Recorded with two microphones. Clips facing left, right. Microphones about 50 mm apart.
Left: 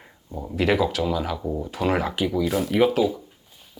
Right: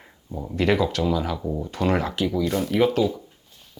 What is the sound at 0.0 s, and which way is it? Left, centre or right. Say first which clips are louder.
Speech: right 1 dB; centre.